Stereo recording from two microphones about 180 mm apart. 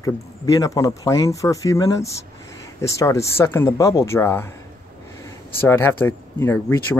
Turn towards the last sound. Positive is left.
turn(degrees=10)  # may be behind; listen again after turning